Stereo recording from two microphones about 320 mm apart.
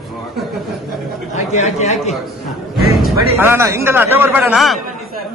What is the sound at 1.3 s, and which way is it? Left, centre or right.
Speech, left.